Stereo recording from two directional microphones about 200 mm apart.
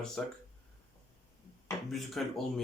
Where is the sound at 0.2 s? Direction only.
Centre (ahead or behind).